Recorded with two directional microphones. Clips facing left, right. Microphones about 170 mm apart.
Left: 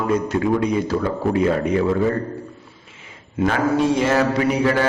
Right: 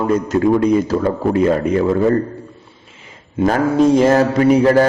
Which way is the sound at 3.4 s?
40° right (ahead or behind).